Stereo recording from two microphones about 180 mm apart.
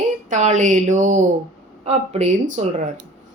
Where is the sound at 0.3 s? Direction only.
40° right (ahead or behind).